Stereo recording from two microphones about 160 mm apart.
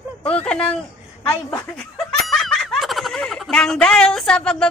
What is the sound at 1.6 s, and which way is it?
Snicker, 5° left (ahead or behind).